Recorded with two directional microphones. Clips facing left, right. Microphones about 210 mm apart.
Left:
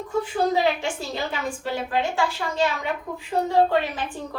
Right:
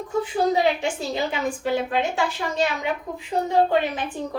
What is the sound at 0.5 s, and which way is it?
A woman's voice, 20° right (ahead or behind).